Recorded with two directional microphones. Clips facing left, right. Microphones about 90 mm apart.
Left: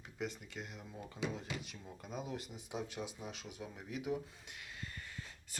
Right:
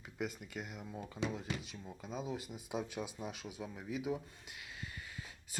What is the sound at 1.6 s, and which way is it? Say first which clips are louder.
Speech: right 2 dB; 5° left (ahead or behind).